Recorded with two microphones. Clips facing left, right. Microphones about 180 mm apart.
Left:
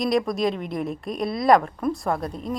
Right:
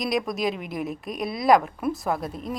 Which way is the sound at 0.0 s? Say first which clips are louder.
Left 3 dB; centre (ahead or behind).